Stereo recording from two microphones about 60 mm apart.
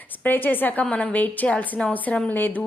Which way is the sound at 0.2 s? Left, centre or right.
Left.